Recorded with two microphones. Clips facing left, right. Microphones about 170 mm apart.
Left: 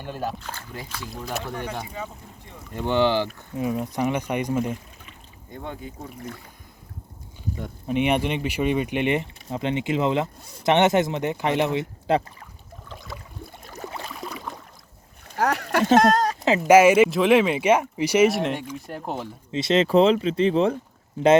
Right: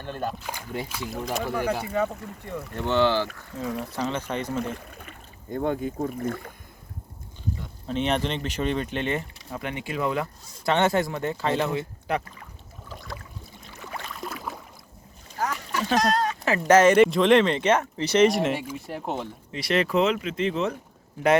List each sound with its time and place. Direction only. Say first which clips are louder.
0.0 s speech: left 1 dB; 5° left (ahead or behind)
0.4 s speech: right 4 dB; 15° right (ahead or behind)
1.2 s speech: right 2 dB; centre (ahead or behind)
1.9 s speech: right 9 dB; 65° right (ahead or behind)
2.7 s speech: left 1 dB; 15° left (ahead or behind)
4.8 s speech: right 4 dB; 55° right (ahead or behind)
7.9 s speech: left 3 dB; 10° left (ahead or behind)
13.4 s a sound: left 5 dB; 55° left (ahead or behind)
14.3 s a sound: even; centre (ahead or behind)
15.3 s a sound: left 7 dB; 70° left (ahead or behind)
16.0 s speech: left 2 dB; 45° left (ahead or behind)
16.6 s speech: left 2 dB; 10° left (ahead or behind)
19.5 s speech: left 5 dB; 20° left (ahead or behind)